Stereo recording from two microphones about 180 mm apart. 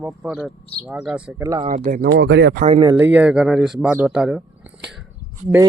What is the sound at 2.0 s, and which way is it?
Speech, 75° right (ahead or behind).